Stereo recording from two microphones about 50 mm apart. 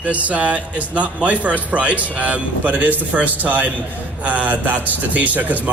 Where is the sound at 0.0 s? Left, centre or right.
Right.